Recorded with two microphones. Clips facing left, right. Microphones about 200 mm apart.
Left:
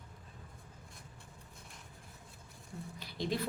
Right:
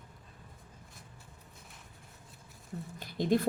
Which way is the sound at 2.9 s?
50° right (ahead or behind).